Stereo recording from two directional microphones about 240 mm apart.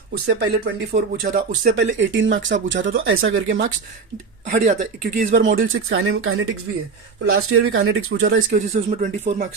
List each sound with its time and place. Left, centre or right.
0.3 s speech: right
4.4 s speech: right
5.6 s speech: right
8.4 s speech: right